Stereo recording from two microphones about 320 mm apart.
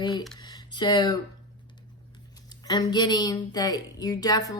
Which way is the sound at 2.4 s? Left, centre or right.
Centre.